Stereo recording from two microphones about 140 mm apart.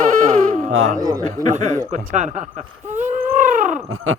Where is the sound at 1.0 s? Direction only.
25° right (ahead or behind).